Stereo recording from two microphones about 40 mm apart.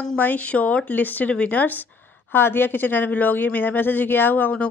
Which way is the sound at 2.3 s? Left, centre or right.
Left.